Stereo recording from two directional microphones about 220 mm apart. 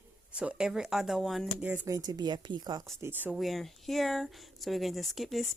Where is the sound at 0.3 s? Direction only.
5° right (ahead or behind).